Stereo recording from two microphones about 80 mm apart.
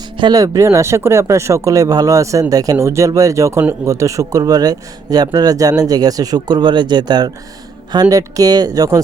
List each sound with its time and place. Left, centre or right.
0.3 s speech: right
8.1 s speech: right